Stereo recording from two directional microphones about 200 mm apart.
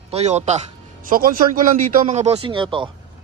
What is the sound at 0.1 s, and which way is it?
Speech, 35° right (ahead or behind).